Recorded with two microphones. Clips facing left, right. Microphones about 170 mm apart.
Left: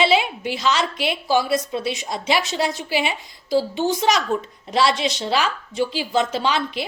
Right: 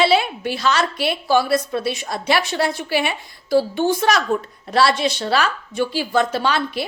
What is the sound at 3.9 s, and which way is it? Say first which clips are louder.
A woman's voice: right 1 dB; 20° left (ahead or behind).